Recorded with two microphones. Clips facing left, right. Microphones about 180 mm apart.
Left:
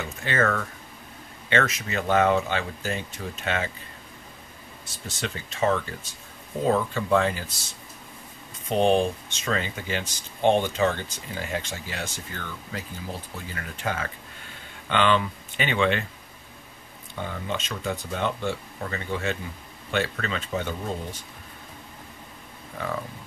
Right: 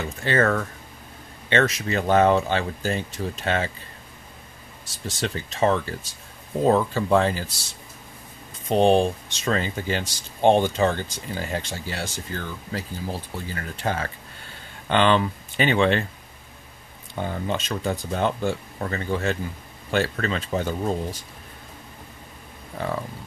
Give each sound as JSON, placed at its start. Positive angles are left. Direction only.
{"t": 0.0, "sound": "speech", "side_deg": -35}
{"t": 5.0, "sound": "speech", "side_deg": -35}
{"t": 8.6, "sound": "speech", "side_deg": -35}
{"t": 17.1, "sound": "speech", "side_deg": -35}